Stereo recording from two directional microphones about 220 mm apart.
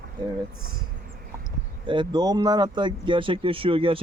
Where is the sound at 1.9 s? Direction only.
20° right (ahead or behind).